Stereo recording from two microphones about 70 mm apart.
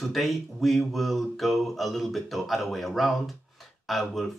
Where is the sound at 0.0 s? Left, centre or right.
Centre.